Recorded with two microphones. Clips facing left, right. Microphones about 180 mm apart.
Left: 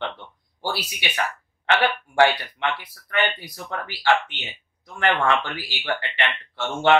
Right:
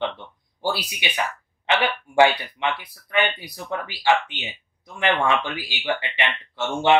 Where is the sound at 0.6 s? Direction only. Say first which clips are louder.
Right 3 dB; 15° right (ahead or behind).